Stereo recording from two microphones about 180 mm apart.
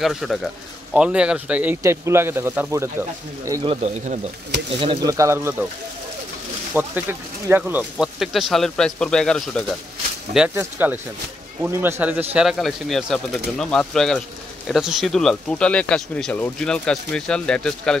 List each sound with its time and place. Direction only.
0.0 s speech: centre (ahead or behind); by 3.6 s 15° right (ahead or behind)
3.6 s speech: 35° right (ahead or behind)
5.1 s speech: 15° right (ahead or behind)
6.7 s speech: 10° right (ahead or behind)
10.3 s speech: 10° right (ahead or behind)